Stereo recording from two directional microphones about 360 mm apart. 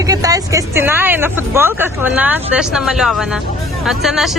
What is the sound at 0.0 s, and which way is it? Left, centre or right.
Speech, centre.